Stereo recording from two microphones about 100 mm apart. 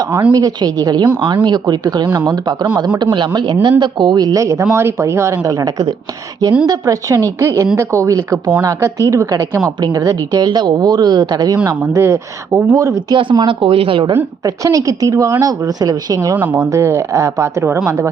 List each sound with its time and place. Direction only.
0.3 s a woman's voice: 40° right (ahead or behind)
11.9 s a woman's voice: 30° right (ahead or behind)
13.3 s speech: 45° right (ahead or behind)
13.6 s a woman's voice: 65° right (ahead or behind)
14.4 s a woman's voice: 35° right (ahead or behind)
16.3 s speech: 20° right (ahead or behind)
16.6 s a woman's voice: 30° right (ahead or behind)